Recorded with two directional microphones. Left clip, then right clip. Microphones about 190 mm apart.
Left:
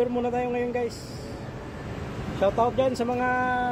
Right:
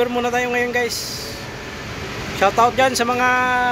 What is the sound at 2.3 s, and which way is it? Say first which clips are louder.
Speech: right 8 dB; 40° right (ahead or behind).